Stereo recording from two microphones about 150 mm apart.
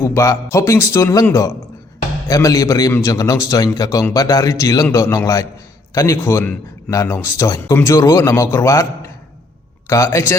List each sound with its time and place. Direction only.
0.0 s speech: 20° left (ahead or behind)